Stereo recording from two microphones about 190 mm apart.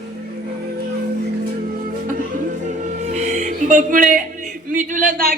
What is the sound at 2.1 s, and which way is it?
Music, 45° right (ahead or behind).